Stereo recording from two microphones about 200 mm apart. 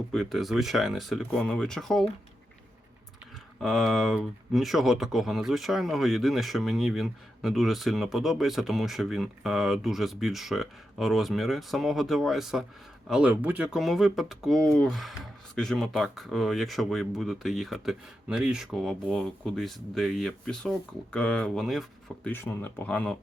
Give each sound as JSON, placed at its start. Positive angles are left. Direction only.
{"t": 0.1, "sound": "speech", "side_deg": 0}
{"t": 3.6, "sound": "speech", "side_deg": 0}